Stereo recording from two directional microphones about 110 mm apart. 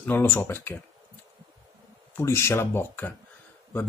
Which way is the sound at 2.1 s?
25° left (ahead or behind).